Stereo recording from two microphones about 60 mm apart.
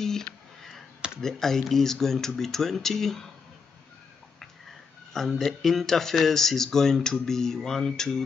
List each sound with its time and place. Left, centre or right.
0.0 s a sound: centre
1.2 s speech: centre
5.4 s speech: centre